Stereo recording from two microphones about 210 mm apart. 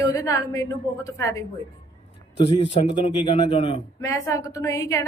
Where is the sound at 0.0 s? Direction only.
15° left (ahead or behind).